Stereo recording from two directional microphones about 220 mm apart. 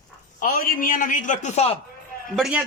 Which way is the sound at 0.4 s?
40° left (ahead or behind).